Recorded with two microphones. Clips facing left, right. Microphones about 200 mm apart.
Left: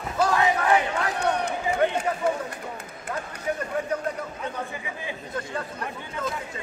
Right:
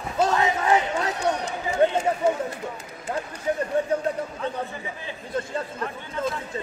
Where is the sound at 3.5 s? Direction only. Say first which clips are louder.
Right 3 dB; 30° right (ahead or behind).